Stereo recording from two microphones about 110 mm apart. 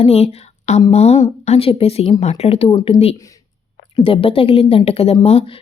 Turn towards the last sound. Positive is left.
turn(degrees=65)  # may be behind; listen again after turning